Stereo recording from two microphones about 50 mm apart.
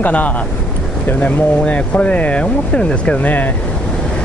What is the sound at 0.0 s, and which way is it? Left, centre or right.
Speech, left.